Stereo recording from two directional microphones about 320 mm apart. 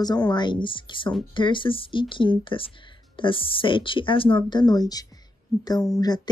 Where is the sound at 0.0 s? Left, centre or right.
Centre.